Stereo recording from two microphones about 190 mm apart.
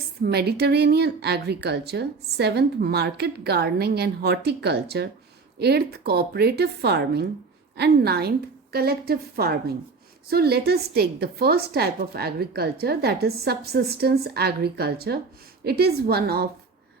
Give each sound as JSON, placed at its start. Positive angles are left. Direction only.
{"t": 0.2, "sound": "a woman's voice", "side_deg": -55}